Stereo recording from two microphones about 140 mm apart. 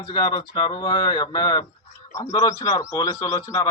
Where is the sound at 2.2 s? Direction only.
25° left (ahead or behind).